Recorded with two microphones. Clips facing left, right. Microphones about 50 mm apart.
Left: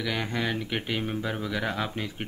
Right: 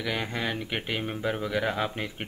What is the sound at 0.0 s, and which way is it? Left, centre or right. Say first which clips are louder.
Speech: left 1 dB; centre.